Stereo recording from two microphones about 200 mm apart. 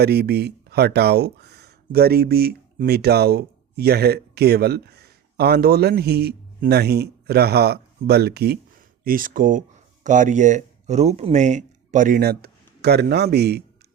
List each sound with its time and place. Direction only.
0.0 s speech: 55° right (ahead or behind)
9.0 s speech: 45° right (ahead or behind)